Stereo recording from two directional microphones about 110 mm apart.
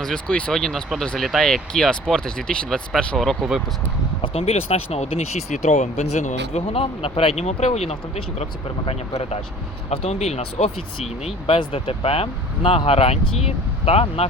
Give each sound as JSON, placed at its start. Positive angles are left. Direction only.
{"t": 0.0, "sound": "speech", "side_deg": 5}
{"t": 4.2, "sound": "speech", "side_deg": 60}